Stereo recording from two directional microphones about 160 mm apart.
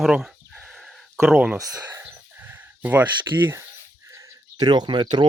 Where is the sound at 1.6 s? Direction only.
20° right (ahead or behind).